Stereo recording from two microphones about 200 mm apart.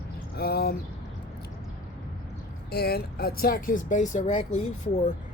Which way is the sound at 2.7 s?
50° left (ahead or behind).